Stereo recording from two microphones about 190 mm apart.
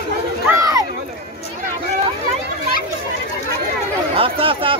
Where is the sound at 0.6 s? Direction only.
15° right (ahead or behind).